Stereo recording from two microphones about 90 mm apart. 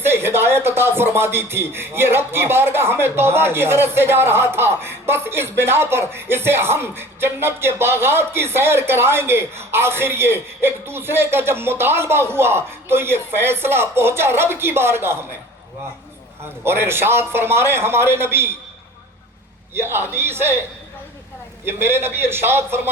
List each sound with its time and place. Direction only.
0.0 s speech: 25° right (ahead or behind)
16.6 s speech: 25° right (ahead or behind)
19.7 s speech: 25° right (ahead or behind)
21.6 s speech: 25° right (ahead or behind)